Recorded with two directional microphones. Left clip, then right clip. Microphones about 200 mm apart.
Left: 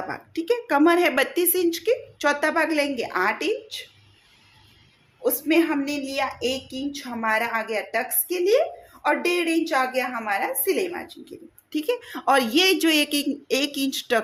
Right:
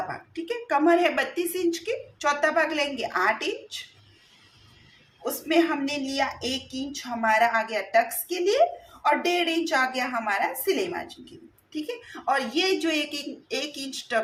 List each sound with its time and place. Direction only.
0.1 s a woman's voice: 45° left (ahead or behind)
5.2 s a woman's voice: 35° left (ahead or behind)
11.7 s speech: 50° left (ahead or behind)